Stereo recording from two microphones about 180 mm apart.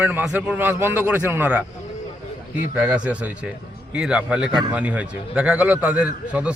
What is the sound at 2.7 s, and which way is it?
A man's voice, 5° right (ahead or behind).